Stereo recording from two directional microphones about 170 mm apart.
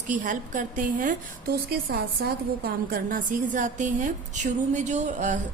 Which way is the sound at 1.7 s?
65° right (ahead or behind).